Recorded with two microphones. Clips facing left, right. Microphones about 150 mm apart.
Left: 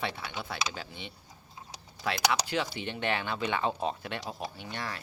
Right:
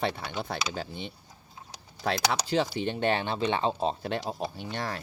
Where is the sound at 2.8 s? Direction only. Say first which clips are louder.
Right 5 dB; 40° right (ahead or behind).